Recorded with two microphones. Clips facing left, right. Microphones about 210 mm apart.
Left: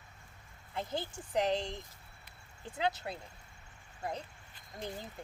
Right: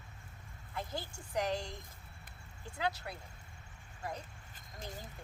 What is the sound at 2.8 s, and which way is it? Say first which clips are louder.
Speech: left 3 dB; 20° left (ahead or behind).